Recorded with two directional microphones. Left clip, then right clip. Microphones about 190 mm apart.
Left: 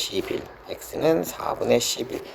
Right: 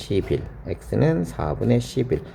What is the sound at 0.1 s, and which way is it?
Speech, 25° left (ahead or behind).